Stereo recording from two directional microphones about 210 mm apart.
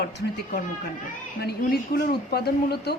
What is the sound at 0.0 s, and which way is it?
Speech, 50° left (ahead or behind).